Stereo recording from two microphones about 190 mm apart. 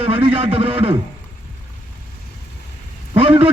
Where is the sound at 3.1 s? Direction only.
30° right (ahead or behind).